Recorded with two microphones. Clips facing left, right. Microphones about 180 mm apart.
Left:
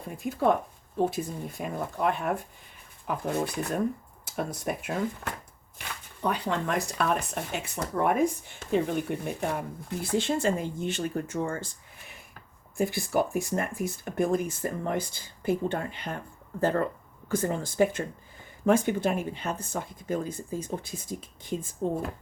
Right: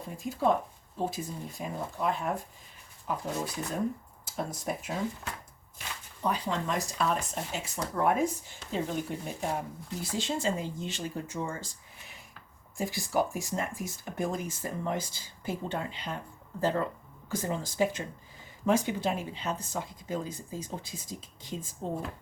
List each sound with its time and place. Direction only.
0.2 s speech: 60° left (ahead or behind)
12.7 s speech: 60° left (ahead or behind)